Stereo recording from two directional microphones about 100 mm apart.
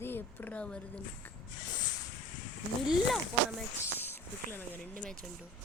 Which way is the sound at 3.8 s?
20° left (ahead or behind).